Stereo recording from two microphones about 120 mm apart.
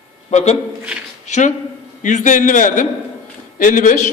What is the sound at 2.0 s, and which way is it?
A man's voice, 90° left.